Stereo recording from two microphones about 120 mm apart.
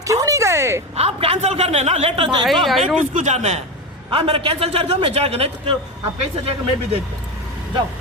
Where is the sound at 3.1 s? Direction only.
85° right.